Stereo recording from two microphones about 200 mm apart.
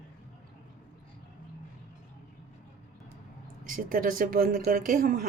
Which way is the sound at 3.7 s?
45° right (ahead or behind).